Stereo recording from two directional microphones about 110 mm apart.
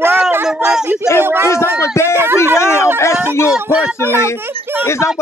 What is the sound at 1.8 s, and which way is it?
Speech, 25° left (ahead or behind).